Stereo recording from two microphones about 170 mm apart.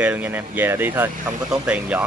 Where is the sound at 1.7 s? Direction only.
5° right (ahead or behind).